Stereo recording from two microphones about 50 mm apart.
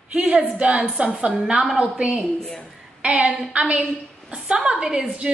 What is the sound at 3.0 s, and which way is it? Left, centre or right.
A woman's voice, right.